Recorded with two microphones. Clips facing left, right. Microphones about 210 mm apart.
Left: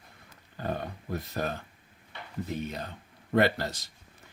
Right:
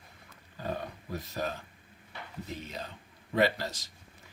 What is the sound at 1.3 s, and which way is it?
Speech, 55° left (ahead or behind).